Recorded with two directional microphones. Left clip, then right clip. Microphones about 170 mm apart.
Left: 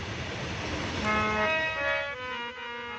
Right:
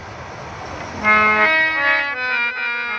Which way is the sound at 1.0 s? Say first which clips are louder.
Right 14 dB; 30° right (ahead or behind).